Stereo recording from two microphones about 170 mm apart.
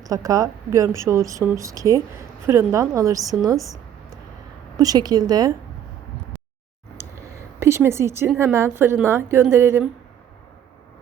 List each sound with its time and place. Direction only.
0.0 s a woman's voice: 20° right (ahead or behind)
4.8 s a woman's voice: 20° right (ahead or behind)
6.9 s a sound: 15° right (ahead or behind)
8.5 s a woman's voice: 15° right (ahead or behind)